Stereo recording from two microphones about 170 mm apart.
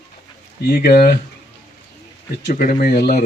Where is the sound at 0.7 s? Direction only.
65° left (ahead or behind).